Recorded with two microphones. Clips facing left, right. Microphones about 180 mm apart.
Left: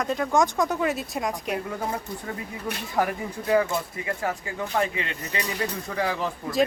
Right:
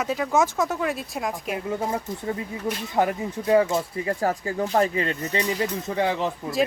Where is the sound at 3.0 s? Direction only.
25° right (ahead or behind).